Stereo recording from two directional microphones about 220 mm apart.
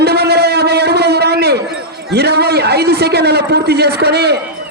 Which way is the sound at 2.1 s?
45° right (ahead or behind).